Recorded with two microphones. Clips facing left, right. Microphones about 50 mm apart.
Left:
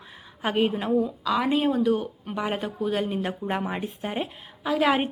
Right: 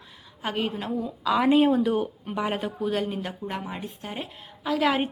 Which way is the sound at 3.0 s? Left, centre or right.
Centre.